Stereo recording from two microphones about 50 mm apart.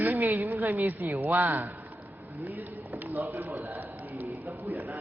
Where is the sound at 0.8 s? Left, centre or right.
Right.